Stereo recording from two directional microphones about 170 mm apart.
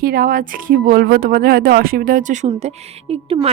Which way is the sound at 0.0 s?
60° right (ahead or behind).